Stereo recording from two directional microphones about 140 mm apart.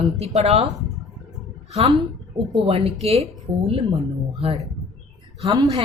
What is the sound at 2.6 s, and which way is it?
Speech, 45° right (ahead or behind).